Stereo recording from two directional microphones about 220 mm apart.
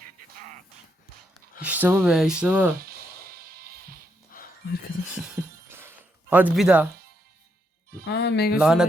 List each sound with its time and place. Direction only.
1.6 s speech: 10° right (ahead or behind)
3.3 s music: 45° right (ahead or behind)
4.3 s dog: 40° left (ahead or behind)
5.1 s a sound: 10° right (ahead or behind)
8.0 s speech: 50° left (ahead or behind)
8.5 s speech: 5° right (ahead or behind)